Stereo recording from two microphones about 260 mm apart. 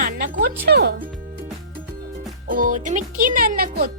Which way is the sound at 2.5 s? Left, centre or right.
Right.